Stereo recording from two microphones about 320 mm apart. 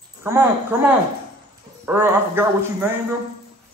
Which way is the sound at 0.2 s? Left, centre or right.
Centre.